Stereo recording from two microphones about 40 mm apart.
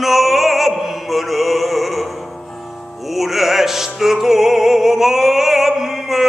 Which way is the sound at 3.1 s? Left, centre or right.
Centre.